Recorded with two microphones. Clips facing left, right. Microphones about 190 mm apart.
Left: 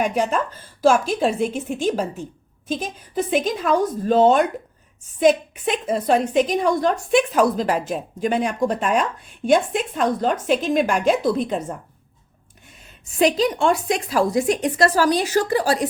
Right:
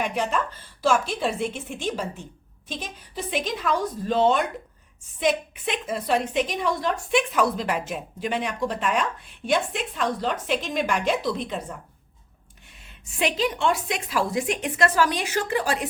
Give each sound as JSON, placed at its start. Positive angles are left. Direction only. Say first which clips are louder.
{"t": 0.0, "sound": "a woman's voice", "louder": "left 5 dB", "side_deg": 45}
{"t": 13.1, "sound": "a woman's voice", "louder": "left 7 dB", "side_deg": 40}